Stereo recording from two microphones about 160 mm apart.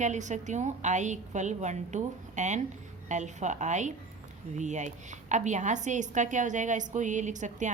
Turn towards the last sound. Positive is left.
turn(degrees=-50)  # may be behind; listen again after turning